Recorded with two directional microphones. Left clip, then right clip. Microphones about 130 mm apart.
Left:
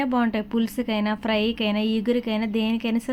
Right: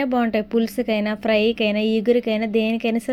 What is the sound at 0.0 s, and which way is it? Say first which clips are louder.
A woman's voice: right 3 dB; 25° right (ahead or behind).